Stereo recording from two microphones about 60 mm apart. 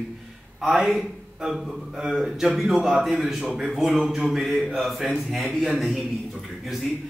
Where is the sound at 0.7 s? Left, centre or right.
Centre.